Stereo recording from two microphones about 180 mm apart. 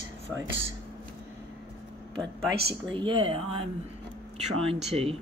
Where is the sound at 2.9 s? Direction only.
30° right (ahead or behind).